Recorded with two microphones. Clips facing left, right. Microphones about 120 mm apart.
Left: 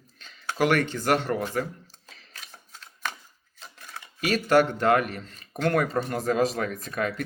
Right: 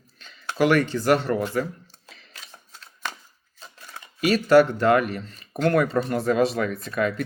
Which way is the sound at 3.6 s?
15° right (ahead or behind).